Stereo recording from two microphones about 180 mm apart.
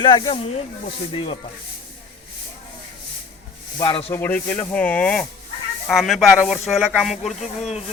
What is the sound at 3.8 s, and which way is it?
Speech, 30° left (ahead or behind).